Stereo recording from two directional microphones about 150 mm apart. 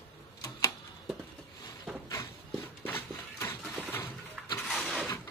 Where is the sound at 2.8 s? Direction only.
15° left (ahead or behind).